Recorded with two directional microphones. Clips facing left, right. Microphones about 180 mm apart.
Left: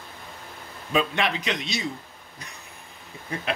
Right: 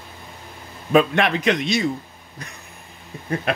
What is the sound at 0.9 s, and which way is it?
A man's voice, 55° right (ahead or behind).